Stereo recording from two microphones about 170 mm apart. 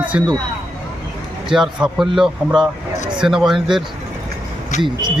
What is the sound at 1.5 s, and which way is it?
Speech, centre (ahead or behind).